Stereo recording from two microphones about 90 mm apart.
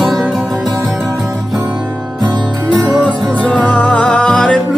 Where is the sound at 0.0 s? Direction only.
Centre (ahead or behind).